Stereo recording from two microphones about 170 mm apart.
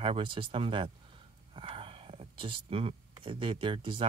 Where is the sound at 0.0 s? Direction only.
30° right (ahead or behind).